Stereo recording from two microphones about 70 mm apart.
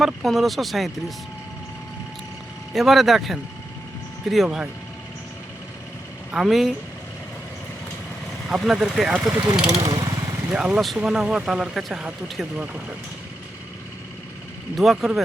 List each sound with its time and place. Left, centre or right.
0.0 s speech: centre
2.7 s speech: centre
4.4 s speech: centre
6.3 s speech: centre
8.4 s speech: centre
9.6 s vehicle: right
10.5 s speech: centre
12.4 s speech: centre
14.8 s speech: centre